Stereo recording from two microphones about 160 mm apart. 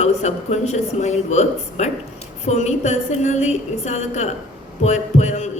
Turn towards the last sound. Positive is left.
turn(degrees=45)  # may be behind; listen again after turning